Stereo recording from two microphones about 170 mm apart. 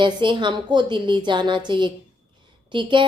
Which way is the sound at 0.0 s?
30° right (ahead or behind).